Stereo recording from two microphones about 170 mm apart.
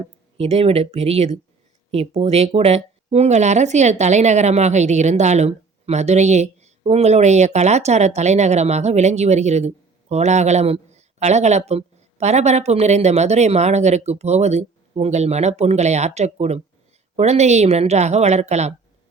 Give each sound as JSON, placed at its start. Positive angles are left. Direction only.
{"t": 0.3, "sound": "speech", "side_deg": -35}